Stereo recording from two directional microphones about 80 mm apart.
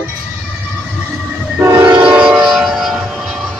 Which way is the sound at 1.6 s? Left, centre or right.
Right.